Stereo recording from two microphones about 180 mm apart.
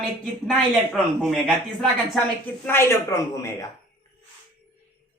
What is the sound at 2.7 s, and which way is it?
Speech, 15° left (ahead or behind).